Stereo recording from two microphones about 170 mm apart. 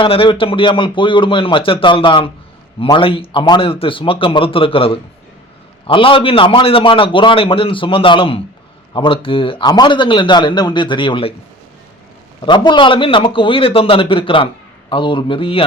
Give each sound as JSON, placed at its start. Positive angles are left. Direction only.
{"t": 0.0, "sound": "a man's voice", "side_deg": 30}
{"t": 12.5, "sound": "a man's voice", "side_deg": 25}